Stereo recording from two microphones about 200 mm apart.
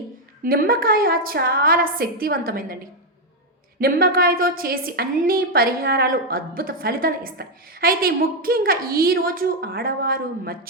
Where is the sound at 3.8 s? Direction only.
45° right (ahead or behind).